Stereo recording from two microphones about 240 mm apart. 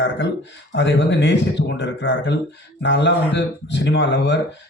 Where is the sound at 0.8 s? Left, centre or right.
Left.